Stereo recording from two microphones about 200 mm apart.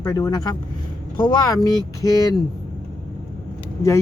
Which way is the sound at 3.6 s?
15° left (ahead or behind).